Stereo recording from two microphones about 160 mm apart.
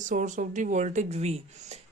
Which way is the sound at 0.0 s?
50° right (ahead or behind).